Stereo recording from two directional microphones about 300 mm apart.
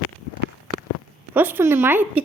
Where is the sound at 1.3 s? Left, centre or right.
Centre.